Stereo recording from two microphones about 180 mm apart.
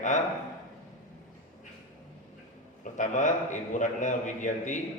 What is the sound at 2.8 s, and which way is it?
A man's voice, 45° left (ahead or behind).